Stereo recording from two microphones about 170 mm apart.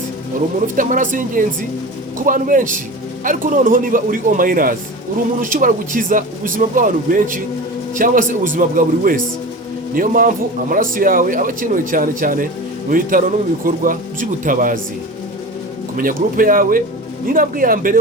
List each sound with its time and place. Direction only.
0.8 s a man's voice: 50° right (ahead or behind)
16.0 s a man's voice: 55° right (ahead or behind)